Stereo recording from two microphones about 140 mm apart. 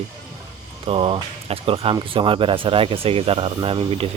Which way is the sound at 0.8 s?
40° right (ahead or behind).